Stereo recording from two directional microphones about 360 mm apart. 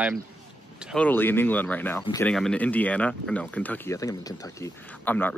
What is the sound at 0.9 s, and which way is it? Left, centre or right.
Speech, centre.